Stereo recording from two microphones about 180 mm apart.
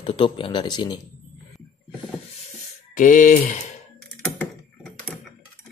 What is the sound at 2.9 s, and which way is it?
Speech, 45° left (ahead or behind).